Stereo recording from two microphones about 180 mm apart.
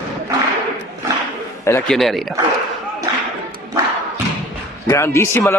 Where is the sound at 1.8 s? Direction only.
Centre (ahead or behind).